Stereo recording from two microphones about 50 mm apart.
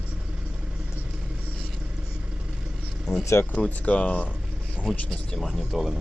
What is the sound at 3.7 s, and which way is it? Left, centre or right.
Speech, left.